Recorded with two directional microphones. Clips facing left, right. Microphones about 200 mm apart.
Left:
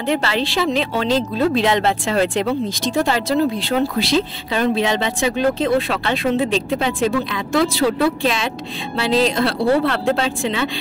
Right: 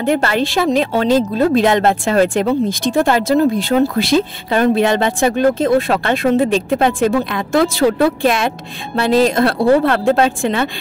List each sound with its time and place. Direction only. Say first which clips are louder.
0.0 s speech: right 4 dB; 50° right (ahead or behind)